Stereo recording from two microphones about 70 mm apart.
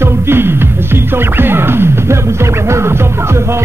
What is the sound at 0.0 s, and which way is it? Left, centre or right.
Music, right.